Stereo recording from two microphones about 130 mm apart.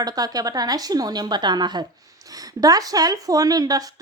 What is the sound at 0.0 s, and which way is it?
A woman's voice, 30° right (ahead or behind).